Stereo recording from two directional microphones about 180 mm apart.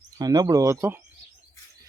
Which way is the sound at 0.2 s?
20° right (ahead or behind).